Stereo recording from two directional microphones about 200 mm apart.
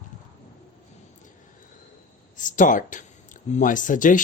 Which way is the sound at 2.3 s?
40° left (ahead or behind).